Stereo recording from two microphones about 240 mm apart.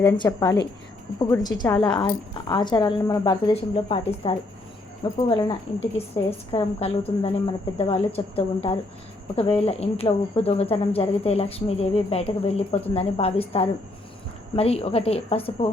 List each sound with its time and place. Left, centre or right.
0.0 s a woman's voice: centre